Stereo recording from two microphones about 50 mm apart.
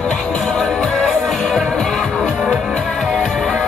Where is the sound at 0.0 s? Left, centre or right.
Centre.